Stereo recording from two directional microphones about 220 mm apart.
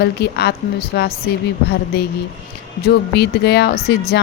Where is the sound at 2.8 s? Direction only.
50° left (ahead or behind).